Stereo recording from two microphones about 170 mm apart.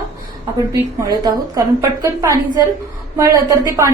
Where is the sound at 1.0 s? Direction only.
20° right (ahead or behind).